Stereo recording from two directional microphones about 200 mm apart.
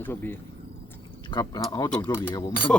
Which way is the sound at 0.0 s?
10° left (ahead or behind).